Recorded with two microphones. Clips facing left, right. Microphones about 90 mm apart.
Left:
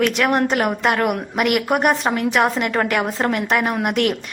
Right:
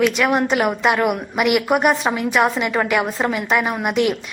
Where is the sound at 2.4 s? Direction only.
5° right (ahead or behind).